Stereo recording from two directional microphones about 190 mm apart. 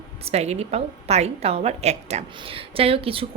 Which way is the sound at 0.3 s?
35° right (ahead or behind).